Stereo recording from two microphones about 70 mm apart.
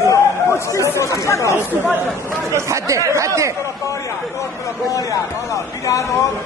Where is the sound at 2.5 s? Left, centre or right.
Right.